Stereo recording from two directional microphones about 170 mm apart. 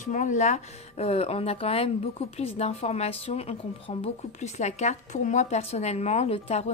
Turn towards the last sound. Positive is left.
turn(degrees=40)  # may be behind; listen again after turning